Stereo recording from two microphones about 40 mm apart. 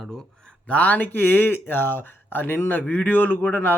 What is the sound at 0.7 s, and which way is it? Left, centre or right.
Speech, left.